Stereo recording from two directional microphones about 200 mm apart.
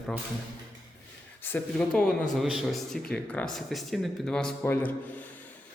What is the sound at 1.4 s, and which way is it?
Speech, 10° left (ahead or behind).